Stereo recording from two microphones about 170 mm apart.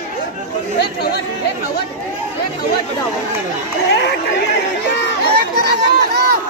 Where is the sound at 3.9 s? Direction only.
75° left (ahead or behind).